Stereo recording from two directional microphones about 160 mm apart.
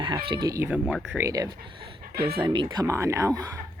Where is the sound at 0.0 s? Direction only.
30° right (ahead or behind).